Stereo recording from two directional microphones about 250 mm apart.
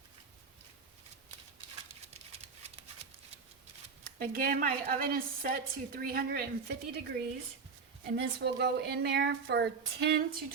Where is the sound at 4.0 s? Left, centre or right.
Right.